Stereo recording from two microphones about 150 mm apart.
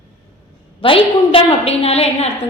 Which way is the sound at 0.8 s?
35° left (ahead or behind).